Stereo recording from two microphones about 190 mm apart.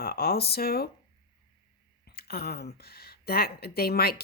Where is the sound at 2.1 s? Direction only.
55° left (ahead or behind).